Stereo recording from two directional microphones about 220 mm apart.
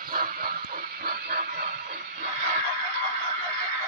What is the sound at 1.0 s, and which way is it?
Music, 45° right (ahead or behind).